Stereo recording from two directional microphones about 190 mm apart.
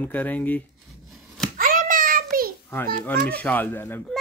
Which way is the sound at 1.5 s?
45° right (ahead or behind).